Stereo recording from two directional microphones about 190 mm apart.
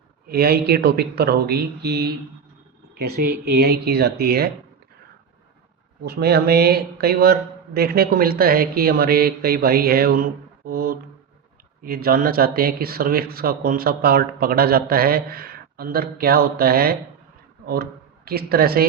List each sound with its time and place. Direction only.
0.3 s speech: 55° right (ahead or behind)
6.1 s speech: 55° right (ahead or behind)
18.3 s speech: 55° right (ahead or behind)